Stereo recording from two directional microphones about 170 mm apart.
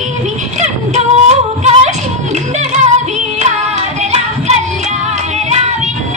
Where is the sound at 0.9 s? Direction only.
40° right (ahead or behind).